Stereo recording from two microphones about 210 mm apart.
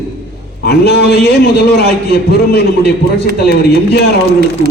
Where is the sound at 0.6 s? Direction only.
50° left (ahead or behind).